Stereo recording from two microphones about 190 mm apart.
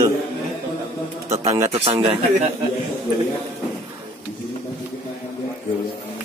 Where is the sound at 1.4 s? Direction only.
15° right (ahead or behind).